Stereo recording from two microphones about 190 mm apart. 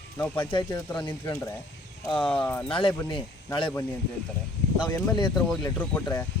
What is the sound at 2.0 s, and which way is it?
Speech, 25° left (ahead or behind).